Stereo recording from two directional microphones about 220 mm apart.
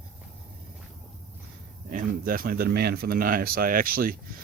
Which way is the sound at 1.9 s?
40° right (ahead or behind).